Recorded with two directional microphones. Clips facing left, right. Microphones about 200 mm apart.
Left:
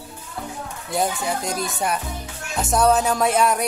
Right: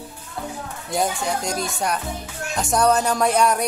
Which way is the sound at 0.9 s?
Centre (ahead or behind).